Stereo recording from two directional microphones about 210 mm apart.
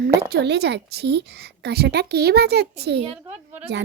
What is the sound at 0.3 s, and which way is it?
A woman's voice, 50° right (ahead or behind).